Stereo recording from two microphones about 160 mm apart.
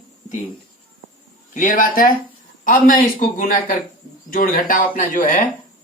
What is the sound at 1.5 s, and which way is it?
A man's voice, 55° left (ahead or behind).